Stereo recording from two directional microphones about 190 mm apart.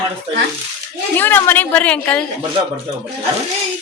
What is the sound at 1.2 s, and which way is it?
A woman's voice, 10° left (ahead or behind).